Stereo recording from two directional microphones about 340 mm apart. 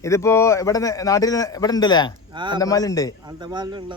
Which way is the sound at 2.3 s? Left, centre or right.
Centre.